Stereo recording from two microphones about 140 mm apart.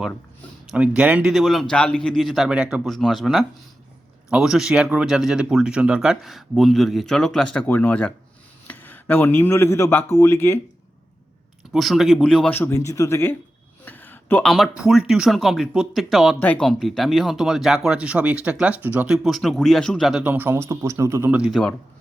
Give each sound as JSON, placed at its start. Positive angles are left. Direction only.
{"t": 0.7, "sound": "a man's voice", "side_deg": -5}
{"t": 11.7, "sound": "a man's voice", "side_deg": 0}
{"t": 12.5, "sound": "speech", "side_deg": 15}
{"t": 13.8, "sound": "a sound", "side_deg": 15}
{"t": 14.5, "sound": "a man's voice", "side_deg": 0}
{"t": 21.3, "sound": "a man's voice", "side_deg": -5}